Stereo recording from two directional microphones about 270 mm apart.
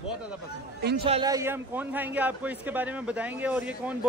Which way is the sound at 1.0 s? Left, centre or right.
Centre.